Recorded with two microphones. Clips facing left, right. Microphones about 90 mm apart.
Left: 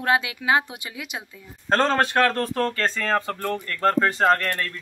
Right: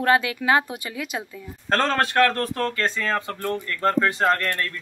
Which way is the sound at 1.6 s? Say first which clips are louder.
Left 1 dB; 25° left (ahead or behind).